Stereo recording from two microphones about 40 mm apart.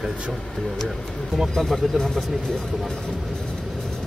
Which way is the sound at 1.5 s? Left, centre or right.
Centre.